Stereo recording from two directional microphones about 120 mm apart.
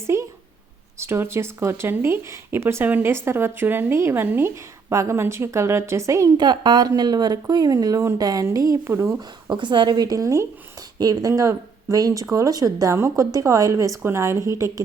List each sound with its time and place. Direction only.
0.9 s speech: 20° right (ahead or behind)
9.5 s a woman's voice: 40° right (ahead or behind); by 14.7 s 25° right (ahead or behind)